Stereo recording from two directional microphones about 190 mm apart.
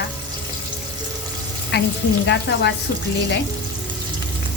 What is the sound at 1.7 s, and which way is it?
Speech, 65° left (ahead or behind).